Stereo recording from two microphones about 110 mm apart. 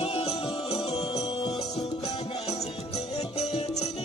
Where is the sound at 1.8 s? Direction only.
70° left (ahead or behind).